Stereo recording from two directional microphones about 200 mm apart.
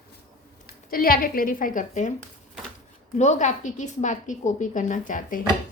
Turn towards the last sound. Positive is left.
turn(degrees=40)  # may be behind; listen again after turning